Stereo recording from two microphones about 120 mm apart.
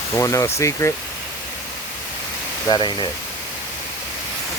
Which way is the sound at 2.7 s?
40° left (ahead or behind).